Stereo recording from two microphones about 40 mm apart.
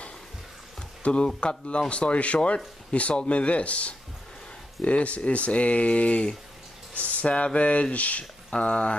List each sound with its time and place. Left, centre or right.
1.0 s speech: left